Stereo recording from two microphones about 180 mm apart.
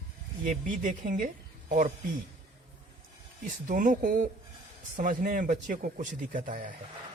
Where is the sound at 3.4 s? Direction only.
50° right (ahead or behind).